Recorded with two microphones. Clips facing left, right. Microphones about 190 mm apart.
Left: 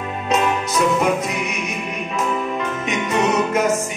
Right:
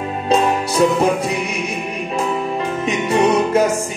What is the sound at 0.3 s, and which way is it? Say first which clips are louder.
Music: right 3 dB; 30° right (ahead or behind).